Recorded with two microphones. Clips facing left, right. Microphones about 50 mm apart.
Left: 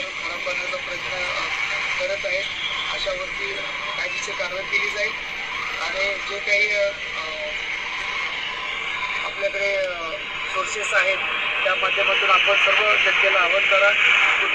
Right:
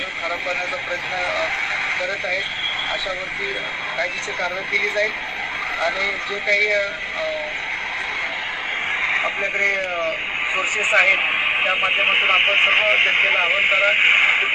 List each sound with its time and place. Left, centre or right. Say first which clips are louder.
2.0 s speech: right 1 dB; right
4.7 s speech: right 3 dB; right
9.0 s speech: right 5 dB; right
10.8 s speech: right 4 dB; right
11.2 s radio: right 4 dB; right
11.6 s speech: left 1 dB; centre